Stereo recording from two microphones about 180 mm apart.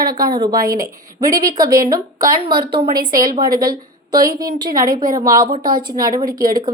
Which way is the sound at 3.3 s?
55° right (ahead or behind).